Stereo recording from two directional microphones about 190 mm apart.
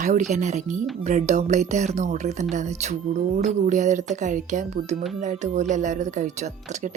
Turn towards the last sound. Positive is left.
turn(degrees=-40)  # may be behind; listen again after turning